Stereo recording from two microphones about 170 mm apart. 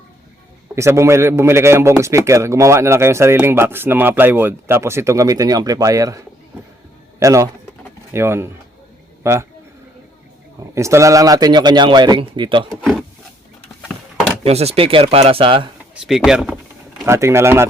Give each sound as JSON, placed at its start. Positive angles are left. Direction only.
{"t": 0.8, "sound": "a man's voice", "side_deg": -15}
{"t": 10.6, "sound": "speech", "side_deg": -15}
{"t": 12.8, "sound": "speech", "side_deg": 0}
{"t": 14.4, "sound": "speech", "side_deg": -40}
{"t": 16.0, "sound": "speech", "side_deg": 0}
{"t": 17.1, "sound": "a man's voice", "side_deg": -15}